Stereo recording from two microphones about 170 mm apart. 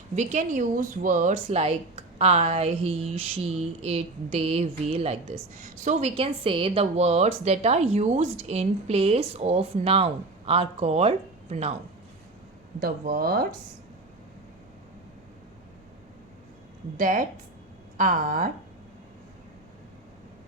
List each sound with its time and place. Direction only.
0.2 s speech: 45° right (ahead or behind)
12.8 s speech: 60° right (ahead or behind)
17.0 s speech: 50° right (ahead or behind)